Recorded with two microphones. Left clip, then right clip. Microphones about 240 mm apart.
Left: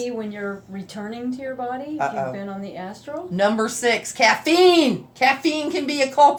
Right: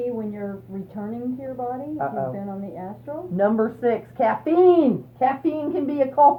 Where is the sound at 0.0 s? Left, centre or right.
Left.